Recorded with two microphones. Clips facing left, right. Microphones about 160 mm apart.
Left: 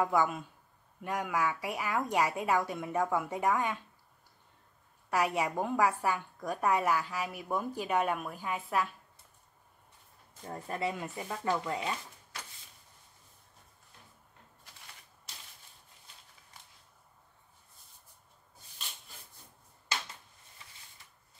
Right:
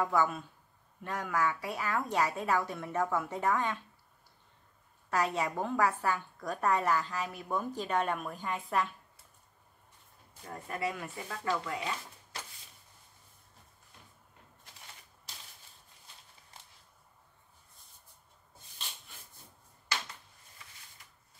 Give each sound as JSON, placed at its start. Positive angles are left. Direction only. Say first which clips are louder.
{"t": 0.0, "sound": "a woman's voice", "louder": "left 1 dB", "side_deg": 15}
{"t": 5.1, "sound": "a woman's voice", "louder": "left 1 dB", "side_deg": 10}
{"t": 10.5, "sound": "speech", "louder": "left 1 dB", "side_deg": 25}